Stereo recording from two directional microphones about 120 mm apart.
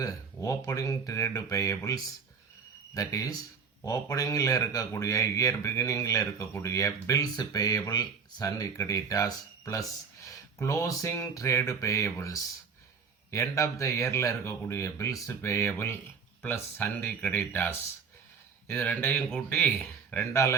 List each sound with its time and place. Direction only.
0.0 s speech: 30° left (ahead or behind)